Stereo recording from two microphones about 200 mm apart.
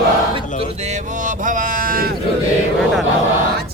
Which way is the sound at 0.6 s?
35° right (ahead or behind).